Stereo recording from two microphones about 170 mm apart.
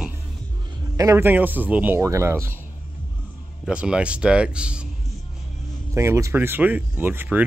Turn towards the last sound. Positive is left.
turn(degrees=-10)  # may be behind; listen again after turning